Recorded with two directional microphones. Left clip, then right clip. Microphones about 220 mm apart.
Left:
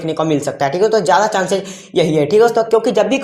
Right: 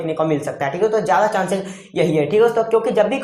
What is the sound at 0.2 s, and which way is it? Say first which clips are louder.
Speech: left 5 dB; 50° left (ahead or behind).